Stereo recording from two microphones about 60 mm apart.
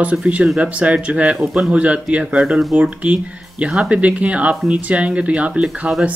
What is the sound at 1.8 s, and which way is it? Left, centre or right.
Speech, right.